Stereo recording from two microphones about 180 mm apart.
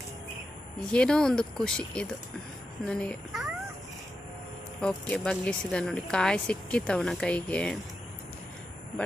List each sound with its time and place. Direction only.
0.9 s speech: 5° left (ahead or behind)
4.8 s speech: 5° left (ahead or behind)
9.0 s speech: 5° left (ahead or behind)